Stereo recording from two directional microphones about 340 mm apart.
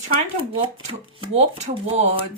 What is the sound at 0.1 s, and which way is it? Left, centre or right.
Speech, centre.